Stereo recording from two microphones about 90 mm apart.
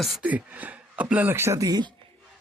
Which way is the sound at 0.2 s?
15° right (ahead or behind).